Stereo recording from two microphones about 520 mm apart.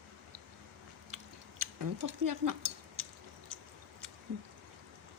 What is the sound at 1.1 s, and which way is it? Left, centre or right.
Chewing, right.